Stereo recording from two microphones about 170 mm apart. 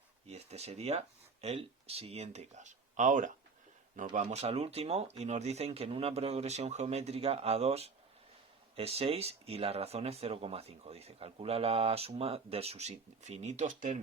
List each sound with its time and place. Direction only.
0.3 s speech: 40° right (ahead or behind)